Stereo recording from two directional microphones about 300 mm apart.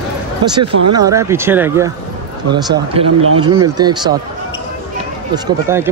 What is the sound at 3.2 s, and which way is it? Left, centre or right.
Speech, right.